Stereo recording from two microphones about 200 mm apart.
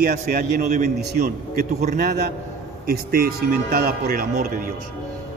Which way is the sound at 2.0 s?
55° right (ahead or behind).